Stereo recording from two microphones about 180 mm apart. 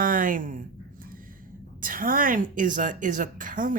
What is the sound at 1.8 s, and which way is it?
Speech, 50° right (ahead or behind).